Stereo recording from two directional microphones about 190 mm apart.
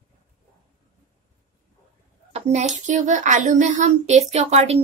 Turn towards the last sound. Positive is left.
turn(degrees=-35)  # may be behind; listen again after turning